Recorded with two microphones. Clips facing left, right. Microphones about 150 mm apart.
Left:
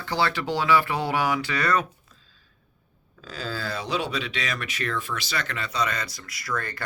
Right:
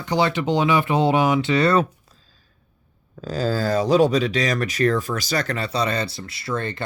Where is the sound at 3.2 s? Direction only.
40° right (ahead or behind).